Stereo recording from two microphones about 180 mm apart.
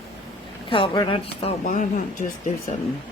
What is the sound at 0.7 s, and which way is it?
Speech, 30° left (ahead or behind).